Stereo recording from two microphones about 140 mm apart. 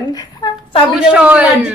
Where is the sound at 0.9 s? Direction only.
10° right (ahead or behind).